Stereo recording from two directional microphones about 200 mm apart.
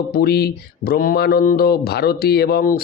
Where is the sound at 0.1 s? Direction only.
50° left (ahead or behind).